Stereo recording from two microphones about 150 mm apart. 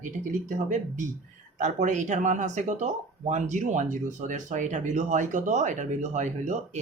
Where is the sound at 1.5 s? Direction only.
55° right (ahead or behind).